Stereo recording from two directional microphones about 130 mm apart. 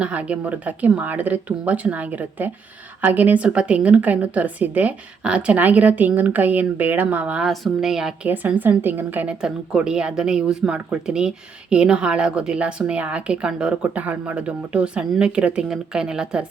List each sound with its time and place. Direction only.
0.0 s a woman's voice: 10° right (ahead or behind)
8.3 s a woman's voice: 15° right (ahead or behind)